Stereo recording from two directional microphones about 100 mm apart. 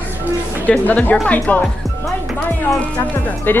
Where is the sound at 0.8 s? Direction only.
15° left (ahead or behind).